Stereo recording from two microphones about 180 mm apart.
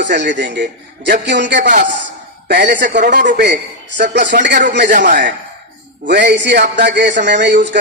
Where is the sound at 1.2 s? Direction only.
75° right (ahead or behind).